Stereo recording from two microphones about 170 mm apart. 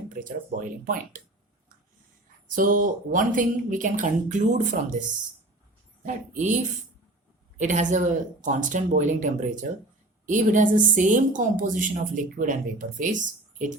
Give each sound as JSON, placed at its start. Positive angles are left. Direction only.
{"t": 0.1, "sound": "a woman's voice", "side_deg": -50}
{"t": 2.6, "sound": "a woman's voice", "side_deg": -55}
{"t": 6.1, "sound": "a woman's voice", "side_deg": -45}
{"t": 7.6, "sound": "a woman's voice", "side_deg": -45}